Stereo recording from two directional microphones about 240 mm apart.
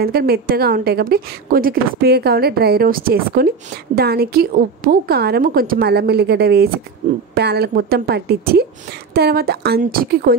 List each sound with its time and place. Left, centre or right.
0.0 s a woman's voice: right
7.3 s a woman's voice: right